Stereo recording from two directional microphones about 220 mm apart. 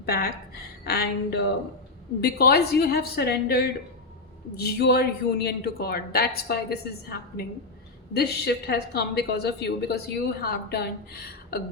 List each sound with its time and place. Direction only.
0.0 s a woman's voice: 45° left (ahead or behind)